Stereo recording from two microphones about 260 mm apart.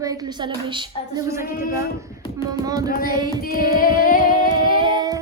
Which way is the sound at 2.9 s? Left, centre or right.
Left.